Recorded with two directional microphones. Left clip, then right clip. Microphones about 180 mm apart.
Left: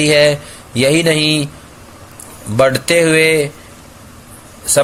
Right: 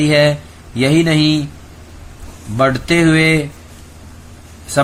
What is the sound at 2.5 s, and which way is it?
Speech, 35° left (ahead or behind).